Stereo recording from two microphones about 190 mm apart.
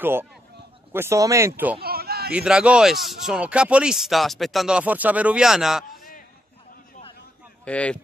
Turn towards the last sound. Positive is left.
turn(degrees=5)  # may be behind; listen again after turning